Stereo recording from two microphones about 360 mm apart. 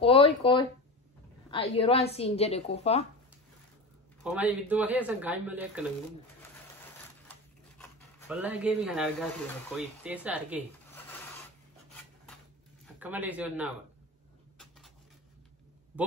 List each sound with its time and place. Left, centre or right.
0.0 s speech: centre
4.2 s speech: centre
8.3 s speech: centre
12.8 s a man's voice: centre